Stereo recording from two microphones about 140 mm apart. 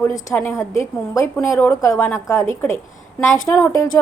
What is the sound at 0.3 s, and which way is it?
A woman's voice, 15° left (ahead or behind).